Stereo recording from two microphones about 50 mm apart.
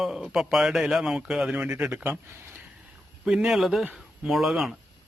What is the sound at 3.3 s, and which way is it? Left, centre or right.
Speech, centre.